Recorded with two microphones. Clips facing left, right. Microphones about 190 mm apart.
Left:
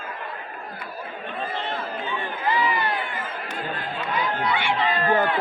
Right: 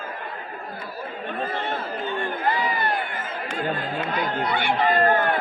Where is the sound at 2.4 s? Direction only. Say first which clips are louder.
Left 2 dB; 45° right (ahead or behind).